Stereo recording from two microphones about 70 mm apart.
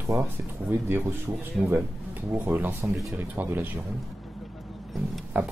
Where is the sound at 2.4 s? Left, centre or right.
Right.